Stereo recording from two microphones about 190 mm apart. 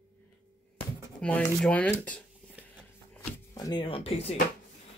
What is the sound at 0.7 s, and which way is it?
Speech, 5° left (ahead or behind).